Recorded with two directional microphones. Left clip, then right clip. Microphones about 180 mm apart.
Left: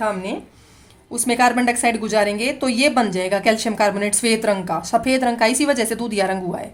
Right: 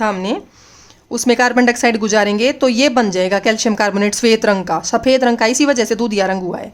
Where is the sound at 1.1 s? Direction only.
30° right (ahead or behind).